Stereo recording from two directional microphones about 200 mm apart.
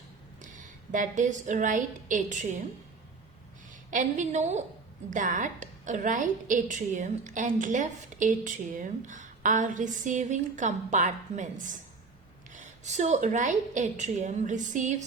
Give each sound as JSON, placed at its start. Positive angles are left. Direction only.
{"t": 0.5, "sound": "a woman's voice", "side_deg": -40}
{"t": 3.7, "sound": "a woman's voice", "side_deg": -40}